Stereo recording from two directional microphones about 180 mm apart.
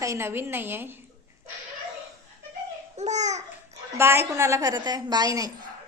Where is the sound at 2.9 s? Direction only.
40° right (ahead or behind).